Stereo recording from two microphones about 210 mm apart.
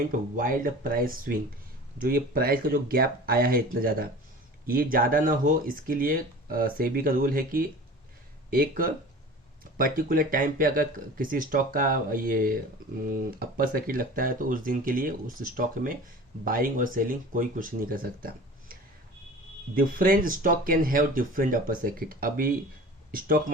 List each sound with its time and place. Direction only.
0.0 s speech: 40° right (ahead or behind)
19.7 s speech: 40° right (ahead or behind)